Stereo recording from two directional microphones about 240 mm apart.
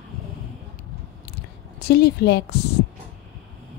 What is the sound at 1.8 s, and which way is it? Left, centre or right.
Speech, left.